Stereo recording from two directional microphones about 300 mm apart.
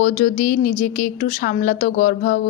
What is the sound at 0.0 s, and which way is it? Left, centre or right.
A woman's voice, left.